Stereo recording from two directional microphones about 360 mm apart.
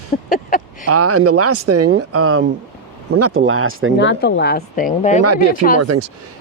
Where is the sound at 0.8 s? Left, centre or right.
Right.